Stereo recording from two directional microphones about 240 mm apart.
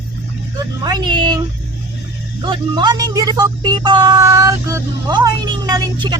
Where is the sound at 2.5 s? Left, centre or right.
Centre.